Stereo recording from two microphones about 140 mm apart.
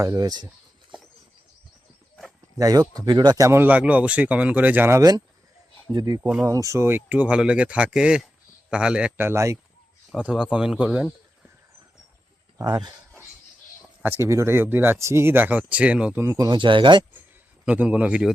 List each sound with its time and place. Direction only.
0.0 s speech: 25° right (ahead or behind)
2.6 s speech: 25° right (ahead or behind)
10.2 s speech: 10° right (ahead or behind)
12.5 s speech: 30° right (ahead or behind)
14.0 s speech: 15° right (ahead or behind)
16.2 s speech: 25° right (ahead or behind)
17.7 s speech: 10° right (ahead or behind)